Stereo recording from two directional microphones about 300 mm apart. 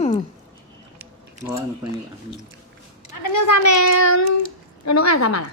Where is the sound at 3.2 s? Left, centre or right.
Left.